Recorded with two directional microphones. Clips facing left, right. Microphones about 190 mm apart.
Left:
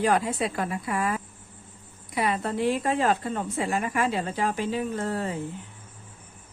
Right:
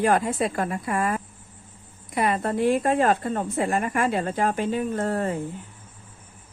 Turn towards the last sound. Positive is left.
turn(degrees=-50)  # may be behind; listen again after turning